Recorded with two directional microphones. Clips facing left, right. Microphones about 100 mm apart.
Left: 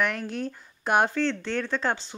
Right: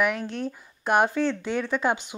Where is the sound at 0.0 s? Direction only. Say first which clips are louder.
Right 2 dB; centre (ahead or behind).